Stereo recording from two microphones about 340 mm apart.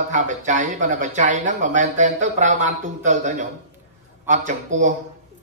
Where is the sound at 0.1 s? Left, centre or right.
Right.